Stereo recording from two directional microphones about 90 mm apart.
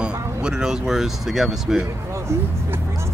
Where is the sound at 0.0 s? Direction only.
10° right (ahead or behind).